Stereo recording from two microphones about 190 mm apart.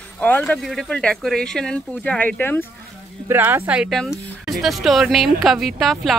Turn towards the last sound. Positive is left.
turn(degrees=0)  # may be behind; listen again after turning